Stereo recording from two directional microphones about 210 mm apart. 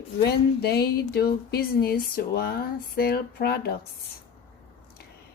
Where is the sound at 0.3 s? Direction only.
50° left (ahead or behind).